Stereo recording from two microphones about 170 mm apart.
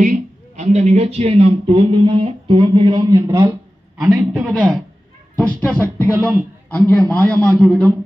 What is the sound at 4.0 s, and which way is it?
Speech, 5° right (ahead or behind).